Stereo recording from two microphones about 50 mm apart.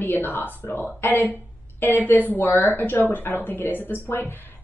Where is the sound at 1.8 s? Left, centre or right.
Left.